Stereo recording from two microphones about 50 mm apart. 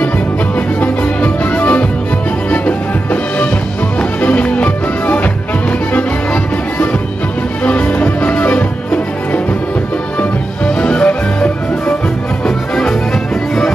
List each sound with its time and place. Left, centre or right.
0.7 s music: left
10.8 s music: left
12.4 s music: centre